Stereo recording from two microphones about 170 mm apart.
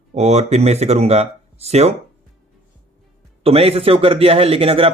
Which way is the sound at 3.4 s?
35° right (ahead or behind).